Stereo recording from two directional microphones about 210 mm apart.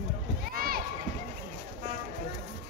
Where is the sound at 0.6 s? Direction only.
45° right (ahead or behind).